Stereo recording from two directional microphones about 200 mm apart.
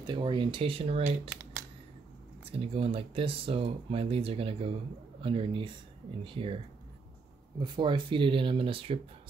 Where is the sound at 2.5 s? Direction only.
30° right (ahead or behind).